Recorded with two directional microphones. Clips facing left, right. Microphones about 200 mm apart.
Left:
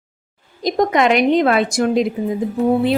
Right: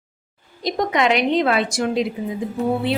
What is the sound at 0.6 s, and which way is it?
Speech, 45° left (ahead or behind).